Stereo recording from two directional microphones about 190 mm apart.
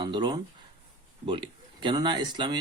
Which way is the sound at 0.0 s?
25° right (ahead or behind).